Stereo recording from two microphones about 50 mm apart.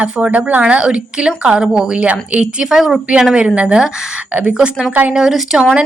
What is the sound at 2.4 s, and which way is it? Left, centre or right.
Speech, centre.